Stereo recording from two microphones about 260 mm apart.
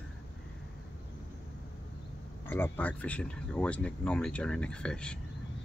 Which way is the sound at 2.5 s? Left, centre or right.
Centre.